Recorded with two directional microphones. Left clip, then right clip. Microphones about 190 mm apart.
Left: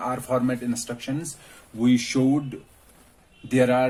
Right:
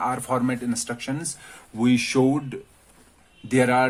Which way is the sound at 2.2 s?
65° right (ahead or behind).